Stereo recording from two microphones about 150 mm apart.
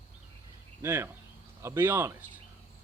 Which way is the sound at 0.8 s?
15° right (ahead or behind).